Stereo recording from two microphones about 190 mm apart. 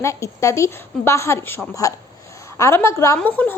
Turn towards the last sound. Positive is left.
turn(degrees=10)  # may be behind; listen again after turning